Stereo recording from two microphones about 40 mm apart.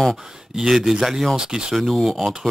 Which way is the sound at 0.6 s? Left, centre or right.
Centre.